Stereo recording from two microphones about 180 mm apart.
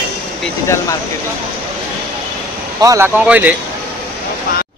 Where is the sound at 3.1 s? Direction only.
10° right (ahead or behind).